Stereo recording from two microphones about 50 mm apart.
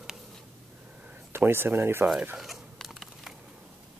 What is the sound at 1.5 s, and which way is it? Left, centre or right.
Speech, right.